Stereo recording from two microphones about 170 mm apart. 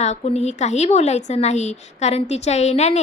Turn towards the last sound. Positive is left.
turn(degrees=40)  # may be behind; listen again after turning